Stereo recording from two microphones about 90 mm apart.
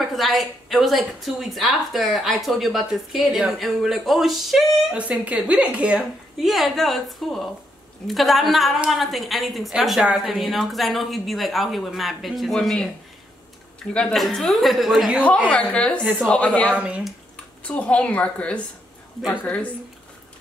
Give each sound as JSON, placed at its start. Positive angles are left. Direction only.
{"t": 0.0, "sound": "a woman's voice", "side_deg": 0}
{"t": 4.9, "sound": "speech", "side_deg": -15}
{"t": 6.4, "sound": "a woman's voice", "side_deg": 0}
{"t": 13.9, "sound": "a woman's voice", "side_deg": 10}
{"t": 15.4, "sound": "a woman's voice", "side_deg": 10}
{"t": 16.0, "sound": "speech", "side_deg": -15}
{"t": 16.3, "sound": "a woman's voice", "side_deg": 15}
{"t": 16.7, "sound": "speech", "side_deg": -15}
{"t": 17.6, "sound": "a woman's voice", "side_deg": 15}